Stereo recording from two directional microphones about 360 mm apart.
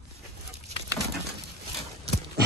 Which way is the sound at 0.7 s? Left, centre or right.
Centre.